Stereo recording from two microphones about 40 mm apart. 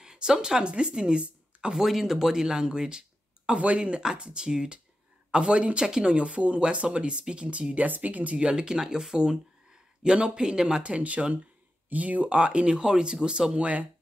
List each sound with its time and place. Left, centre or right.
0.0 s speech: centre
1.8 s speech: centre; by 5.9 s right
5.9 s speech: centre
6.1 s speech: right
7.8 s speech: right
8.4 s speech: right
10.8 s speech: right